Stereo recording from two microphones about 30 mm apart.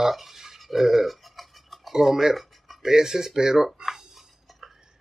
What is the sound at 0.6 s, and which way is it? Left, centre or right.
Toothbrush, centre.